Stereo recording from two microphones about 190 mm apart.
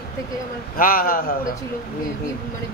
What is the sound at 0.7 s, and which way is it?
Speech, 50° left (ahead or behind).